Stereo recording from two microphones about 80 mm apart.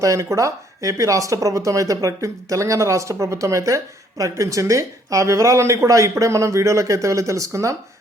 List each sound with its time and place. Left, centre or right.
0.0 s speech: right